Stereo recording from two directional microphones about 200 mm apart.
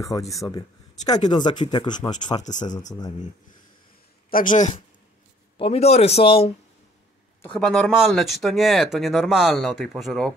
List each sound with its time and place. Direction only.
0.3 s speech: 15° left (ahead or behind)
2.7 s speech: 35° left (ahead or behind)
4.3 s speech: 45° left (ahead or behind)
7.4 s speech: 5° left (ahead or behind)